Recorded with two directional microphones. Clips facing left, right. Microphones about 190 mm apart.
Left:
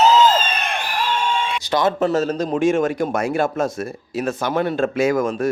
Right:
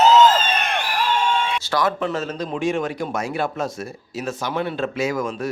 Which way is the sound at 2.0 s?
40° left (ahead or behind).